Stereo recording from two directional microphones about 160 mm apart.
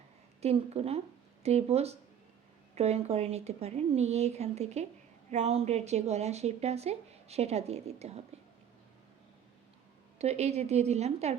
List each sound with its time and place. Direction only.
0.4 s speech: 40° right (ahead or behind)
10.2 s a woman's voice: 40° right (ahead or behind)